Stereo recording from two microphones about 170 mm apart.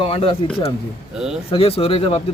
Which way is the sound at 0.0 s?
35° left (ahead or behind).